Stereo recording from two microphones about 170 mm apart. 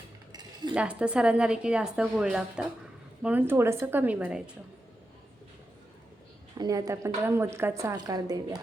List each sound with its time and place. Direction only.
0.7 s a woman's voice: 5° right (ahead or behind)
6.6 s a woman's voice: 20° right (ahead or behind)